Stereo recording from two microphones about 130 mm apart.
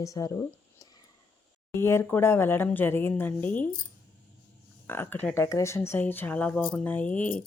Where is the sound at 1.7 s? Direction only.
20° left (ahead or behind).